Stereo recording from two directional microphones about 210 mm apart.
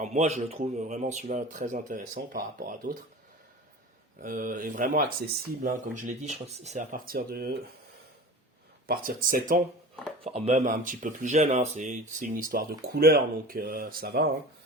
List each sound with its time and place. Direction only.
0.0 s speech: 35° right (ahead or behind)
4.2 s speech: 40° right (ahead or behind)
8.9 s speech: 45° right (ahead or behind)
10.2 s speech: 30° right (ahead or behind); by 14.3 s 45° right (ahead or behind)